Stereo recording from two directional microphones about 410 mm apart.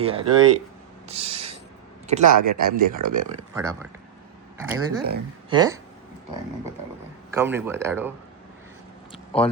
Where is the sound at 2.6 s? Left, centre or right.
Right.